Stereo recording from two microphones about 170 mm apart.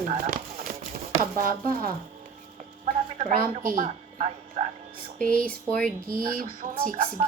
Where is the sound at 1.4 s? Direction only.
55° right (ahead or behind).